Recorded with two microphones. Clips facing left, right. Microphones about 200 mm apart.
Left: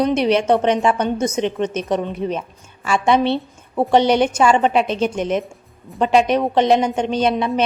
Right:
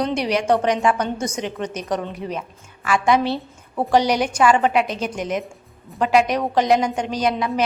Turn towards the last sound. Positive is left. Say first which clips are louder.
# left 3 dB
turn(degrees=25)  # may be behind; listen again after turning